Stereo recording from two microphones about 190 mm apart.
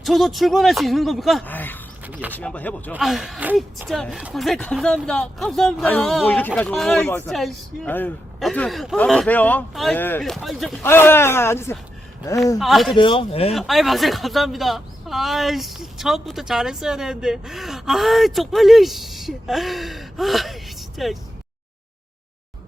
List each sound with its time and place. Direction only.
0.0 s speech: centre (ahead or behind)
2.0 s speech: 10° right (ahead or behind)
2.4 s a man's voice: 5° left (ahead or behind)
10.8 s a man's voice: 10° left (ahead or behind)
12.5 s speech: centre (ahead or behind)
13.0 s speech: 25° left (ahead or behind)
13.5 s speech: centre (ahead or behind)